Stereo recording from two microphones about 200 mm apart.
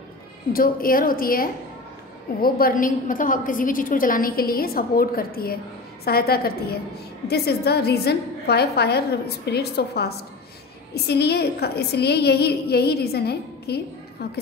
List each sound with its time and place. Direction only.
0.5 s a woman's voice: 45° left (ahead or behind)